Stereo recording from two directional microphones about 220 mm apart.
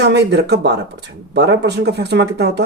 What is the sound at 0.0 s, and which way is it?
Speech, 50° right (ahead or behind).